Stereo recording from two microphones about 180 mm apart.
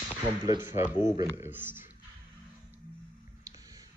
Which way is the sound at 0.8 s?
15° right (ahead or behind).